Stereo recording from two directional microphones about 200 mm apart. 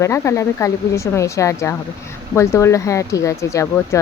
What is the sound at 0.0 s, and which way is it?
Speech, 15° left (ahead or behind).